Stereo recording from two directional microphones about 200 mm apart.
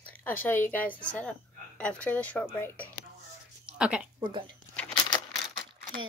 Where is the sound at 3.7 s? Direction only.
5° right (ahead or behind).